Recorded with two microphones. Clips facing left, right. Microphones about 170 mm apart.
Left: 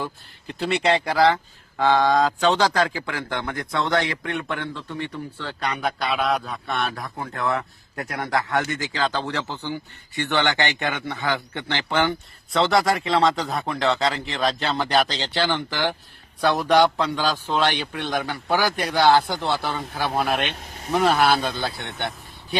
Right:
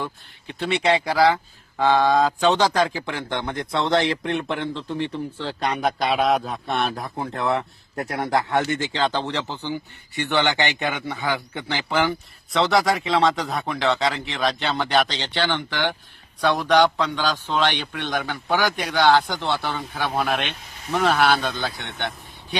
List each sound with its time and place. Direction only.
0.0 s a man's voice: centre (ahead or behind)
3.1 s a man's voice: 25° right (ahead or behind); by 22.1 s 10° left (ahead or behind)